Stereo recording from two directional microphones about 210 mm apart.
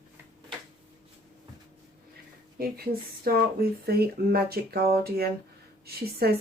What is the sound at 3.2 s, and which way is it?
Speech, 45° right (ahead or behind).